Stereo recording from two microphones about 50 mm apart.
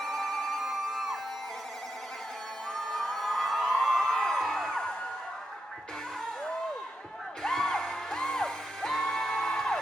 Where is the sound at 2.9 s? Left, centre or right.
Centre.